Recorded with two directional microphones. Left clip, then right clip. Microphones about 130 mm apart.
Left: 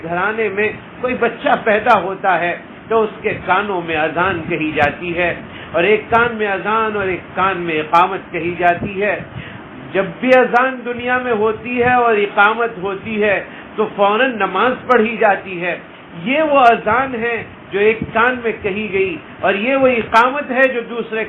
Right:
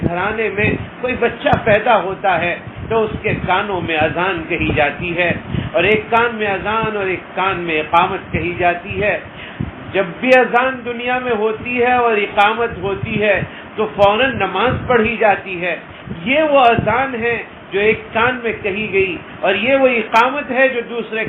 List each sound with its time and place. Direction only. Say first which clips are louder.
0.1 s a man's voice: left 6 dB; 40° left (ahead or behind)